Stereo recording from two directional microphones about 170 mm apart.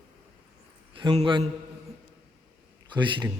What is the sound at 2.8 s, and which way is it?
Speech, 25° right (ahead or behind).